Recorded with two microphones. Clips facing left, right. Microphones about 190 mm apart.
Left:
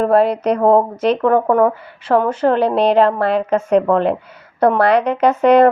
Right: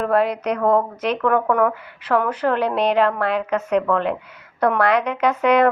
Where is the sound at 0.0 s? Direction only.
30° left (ahead or behind).